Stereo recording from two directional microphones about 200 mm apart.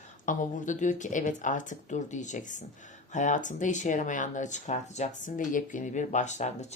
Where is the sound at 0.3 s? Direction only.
40° left (ahead or behind).